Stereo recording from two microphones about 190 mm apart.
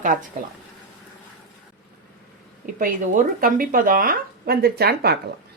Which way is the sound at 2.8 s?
45° right (ahead or behind).